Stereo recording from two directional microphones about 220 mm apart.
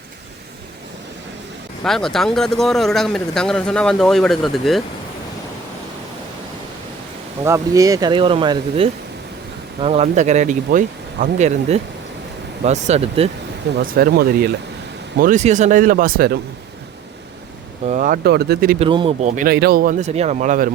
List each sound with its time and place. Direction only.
1.8 s speech: centre (ahead or behind)
7.4 s speech: 15° right (ahead or behind)
13.7 s speech: 45° right (ahead or behind)
15.2 s speech: 35° right (ahead or behind)
17.8 s speech: 35° right (ahead or behind)
18.8 s speech: 25° right (ahead or behind)
19.4 s speech: 45° right (ahead or behind)